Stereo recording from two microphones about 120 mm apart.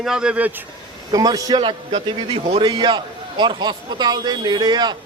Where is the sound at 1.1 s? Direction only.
30° right (ahead or behind).